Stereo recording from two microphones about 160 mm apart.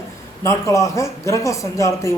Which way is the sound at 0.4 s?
20° left (ahead or behind).